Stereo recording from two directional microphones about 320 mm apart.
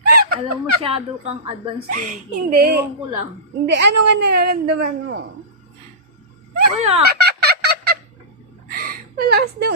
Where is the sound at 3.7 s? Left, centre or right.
Right.